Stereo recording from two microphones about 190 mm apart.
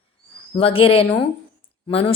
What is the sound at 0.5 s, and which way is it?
A woman's voice, 30° left (ahead or behind).